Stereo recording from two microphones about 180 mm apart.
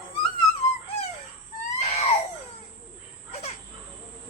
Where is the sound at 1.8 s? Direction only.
35° left (ahead or behind).